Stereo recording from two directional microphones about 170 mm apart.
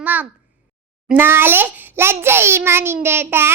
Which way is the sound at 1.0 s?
10° right (ahead or behind).